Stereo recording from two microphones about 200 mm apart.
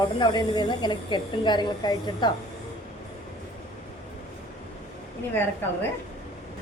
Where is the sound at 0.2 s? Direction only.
20° left (ahead or behind).